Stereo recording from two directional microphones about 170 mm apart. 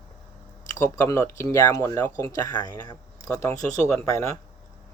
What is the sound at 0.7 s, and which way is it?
A man's voice, 15° left (ahead or behind).